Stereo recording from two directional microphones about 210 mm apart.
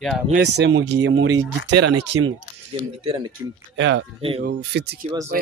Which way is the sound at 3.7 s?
60° right (ahead or behind).